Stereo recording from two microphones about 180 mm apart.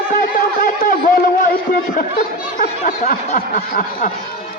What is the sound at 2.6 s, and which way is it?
A man's voice, 45° left (ahead or behind).